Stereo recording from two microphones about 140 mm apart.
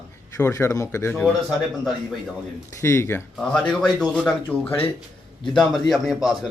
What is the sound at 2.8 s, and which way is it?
Speech, 20° left (ahead or behind).